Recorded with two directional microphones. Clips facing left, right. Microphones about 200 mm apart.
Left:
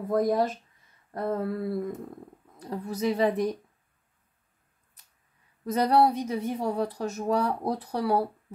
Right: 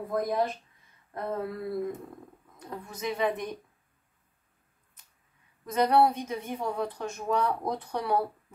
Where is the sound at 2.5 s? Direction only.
35° left (ahead or behind).